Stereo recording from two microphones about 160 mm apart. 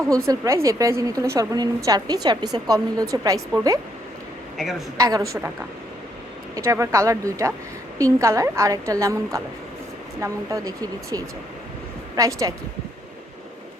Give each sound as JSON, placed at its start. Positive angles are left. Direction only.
{"t": 0.3, "sound": "a woman's voice", "side_deg": -20}
{"t": 4.5, "sound": "a woman's voice", "side_deg": 0}
{"t": 4.9, "sound": "a woman's voice", "side_deg": -20}
{"t": 6.6, "sound": "a woman's voice", "side_deg": -15}